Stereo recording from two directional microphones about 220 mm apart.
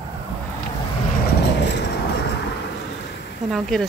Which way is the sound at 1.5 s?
50° left (ahead or behind).